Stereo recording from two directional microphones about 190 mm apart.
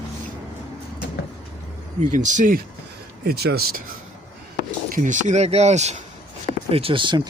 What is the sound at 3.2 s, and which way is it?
Speech, 55° right (ahead or behind).